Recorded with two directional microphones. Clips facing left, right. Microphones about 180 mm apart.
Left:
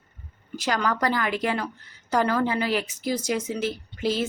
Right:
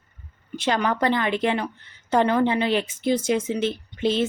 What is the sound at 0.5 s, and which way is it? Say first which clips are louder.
A woman's voice: right 2 dB; 25° right (ahead or behind).